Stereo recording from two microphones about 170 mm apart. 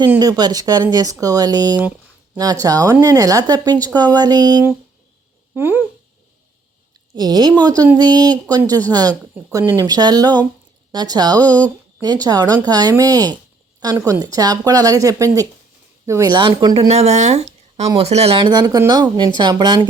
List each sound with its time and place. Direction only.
0.2 s speech: 25° right (ahead or behind)
5.5 s speech: 10° right (ahead or behind)
7.2 s speech: 25° right (ahead or behind)
16.9 s speech: 40° right (ahead or behind)